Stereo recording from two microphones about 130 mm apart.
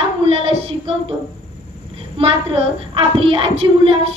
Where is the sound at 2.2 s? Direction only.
45° right (ahead or behind).